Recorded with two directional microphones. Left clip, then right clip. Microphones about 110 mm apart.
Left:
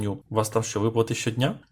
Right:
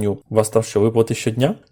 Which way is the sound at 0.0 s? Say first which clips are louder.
Right 8 dB; 45° right (ahead or behind).